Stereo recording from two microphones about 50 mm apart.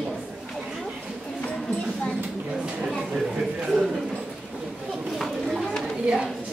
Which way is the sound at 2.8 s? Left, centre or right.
Centre.